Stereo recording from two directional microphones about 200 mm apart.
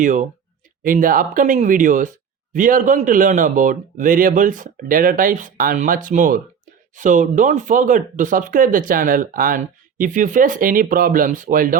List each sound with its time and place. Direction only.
0.0 s speech: 40° right (ahead or behind)